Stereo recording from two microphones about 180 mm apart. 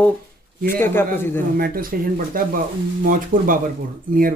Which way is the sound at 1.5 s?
55° right (ahead or behind).